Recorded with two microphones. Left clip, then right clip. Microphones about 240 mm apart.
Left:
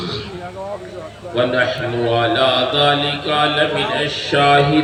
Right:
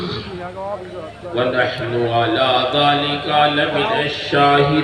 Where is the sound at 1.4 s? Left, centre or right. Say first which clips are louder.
Left 1 dB; left.